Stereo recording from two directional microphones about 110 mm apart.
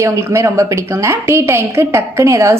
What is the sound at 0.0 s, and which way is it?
A woman's voice, 25° right (ahead or behind).